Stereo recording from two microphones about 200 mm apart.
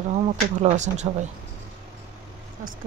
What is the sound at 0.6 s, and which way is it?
Speech, 35° right (ahead or behind).